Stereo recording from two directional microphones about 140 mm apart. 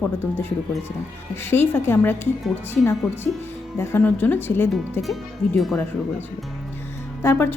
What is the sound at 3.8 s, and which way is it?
Speech, 15° left (ahead or behind).